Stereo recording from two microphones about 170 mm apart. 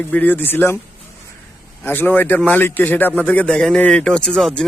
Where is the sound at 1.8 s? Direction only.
10° left (ahead or behind).